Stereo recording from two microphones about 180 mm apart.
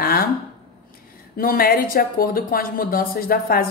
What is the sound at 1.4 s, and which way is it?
Speech, 55° left (ahead or behind).